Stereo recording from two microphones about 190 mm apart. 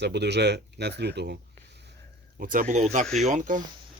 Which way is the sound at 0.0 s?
65° right (ahead or behind).